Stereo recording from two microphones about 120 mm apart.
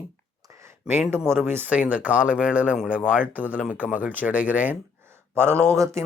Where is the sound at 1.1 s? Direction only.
20° right (ahead or behind).